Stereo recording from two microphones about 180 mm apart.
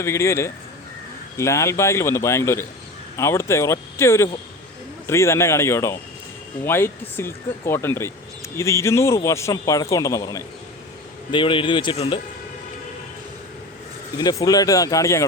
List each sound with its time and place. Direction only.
0.0 s speech: 15° left (ahead or behind)
14.2 s speech: 20° left (ahead or behind)